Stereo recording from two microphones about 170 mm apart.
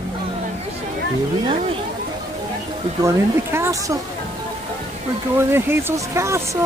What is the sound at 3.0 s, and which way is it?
Speech, 15° right (ahead or behind).